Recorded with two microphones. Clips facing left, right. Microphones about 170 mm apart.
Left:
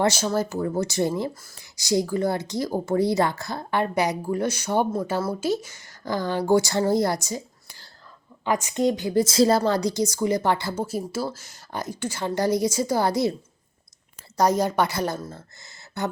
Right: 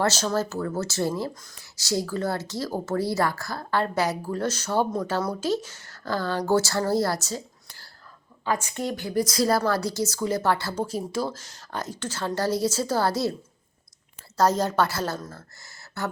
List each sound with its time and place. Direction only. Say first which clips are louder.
0.0 s a woman's voice: left 2 dB; 10° left (ahead or behind)
1.3 s a woman's voice: left 1 dB; 5° left (ahead or behind)
14.3 s a woman's voice: left 1 dB; 15° left (ahead or behind)